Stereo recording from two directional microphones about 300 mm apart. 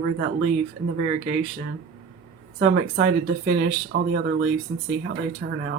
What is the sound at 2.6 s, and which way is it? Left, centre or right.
Speech, right.